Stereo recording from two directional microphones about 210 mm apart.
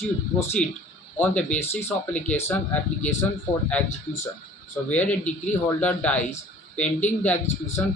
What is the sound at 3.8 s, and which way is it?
Speech, 35° left (ahead or behind).